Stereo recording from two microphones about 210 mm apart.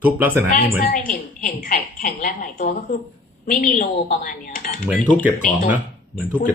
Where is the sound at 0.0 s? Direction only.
10° right (ahead or behind).